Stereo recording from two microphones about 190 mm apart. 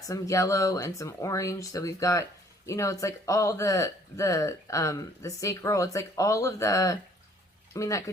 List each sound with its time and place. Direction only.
0.1 s speech: 15° left (ahead or behind)